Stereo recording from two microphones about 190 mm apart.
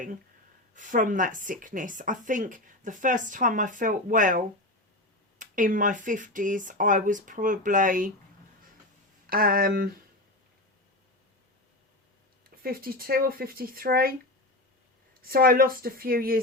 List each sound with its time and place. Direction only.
0.8 s a woman's voice: 45° right (ahead or behind)
9.2 s a woman's voice: 50° right (ahead or behind)
12.6 s a woman's voice: 50° right (ahead or behind)
15.1 s a woman's voice: 50° right (ahead or behind)